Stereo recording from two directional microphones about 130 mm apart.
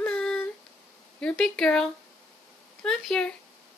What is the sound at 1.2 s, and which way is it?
A woman's voice, 5° left (ahead or behind).